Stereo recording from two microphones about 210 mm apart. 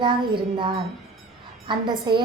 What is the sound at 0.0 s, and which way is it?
A woman's voice, 25° right (ahead or behind).